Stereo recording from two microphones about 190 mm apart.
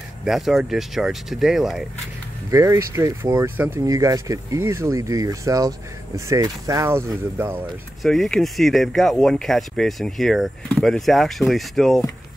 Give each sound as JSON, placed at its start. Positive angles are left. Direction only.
{"t": 0.2, "sound": "speech", "side_deg": 0}
{"t": 2.5, "sound": "speech", "side_deg": -15}
{"t": 8.0, "sound": "speech", "side_deg": 0}